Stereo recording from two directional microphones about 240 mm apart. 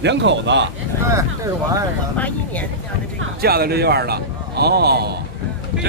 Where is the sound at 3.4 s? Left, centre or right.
Right.